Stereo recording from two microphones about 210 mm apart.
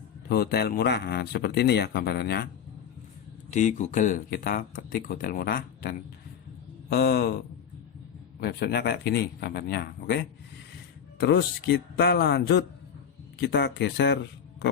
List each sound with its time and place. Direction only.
0.3 s speech: 50° left (ahead or behind)
3.5 s speech: 35° left (ahead or behind); by 14.2 s 55° left (ahead or behind)